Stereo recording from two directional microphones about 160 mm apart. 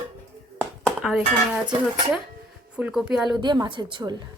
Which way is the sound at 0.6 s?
Centre (ahead or behind).